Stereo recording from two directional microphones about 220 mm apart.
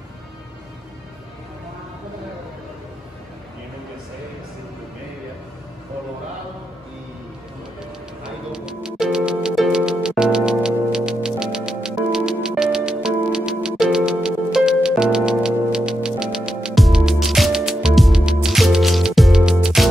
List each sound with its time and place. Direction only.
8.2 s music: 5° right (ahead or behind)